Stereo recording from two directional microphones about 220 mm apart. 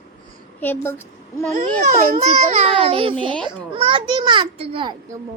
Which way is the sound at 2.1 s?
30° right (ahead or behind).